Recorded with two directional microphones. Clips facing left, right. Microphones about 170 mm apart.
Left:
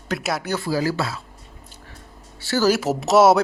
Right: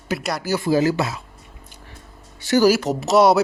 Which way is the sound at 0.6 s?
20° right (ahead or behind).